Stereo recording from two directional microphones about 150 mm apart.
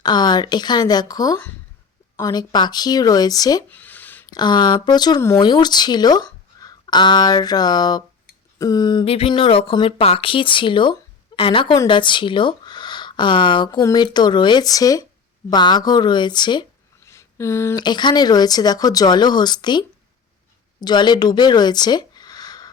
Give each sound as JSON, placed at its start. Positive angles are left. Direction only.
{"t": 0.0, "sound": "speech", "side_deg": 30}
{"t": 3.7, "sound": "a sound", "side_deg": 10}
{"t": 4.3, "sound": "speech", "side_deg": 30}
{"t": 17.1, "sound": "a sound", "side_deg": 20}
{"t": 17.7, "sound": "speech", "side_deg": 30}
{"t": 20.8, "sound": "speech", "side_deg": 30}